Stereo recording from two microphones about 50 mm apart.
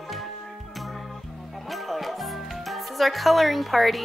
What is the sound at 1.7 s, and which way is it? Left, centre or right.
Music, centre.